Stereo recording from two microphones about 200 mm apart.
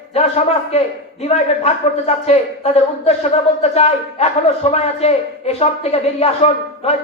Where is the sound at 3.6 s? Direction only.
30° left (ahead or behind).